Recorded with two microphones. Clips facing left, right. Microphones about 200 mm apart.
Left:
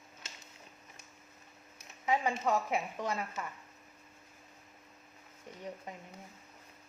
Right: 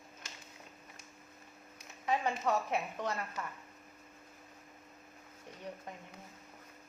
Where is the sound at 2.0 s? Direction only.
10° left (ahead or behind).